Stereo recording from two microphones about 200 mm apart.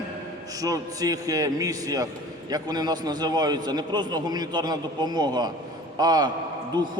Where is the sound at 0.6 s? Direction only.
15° right (ahead or behind).